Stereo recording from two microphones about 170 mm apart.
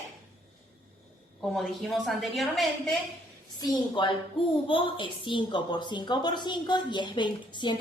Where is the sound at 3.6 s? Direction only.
25° left (ahead or behind).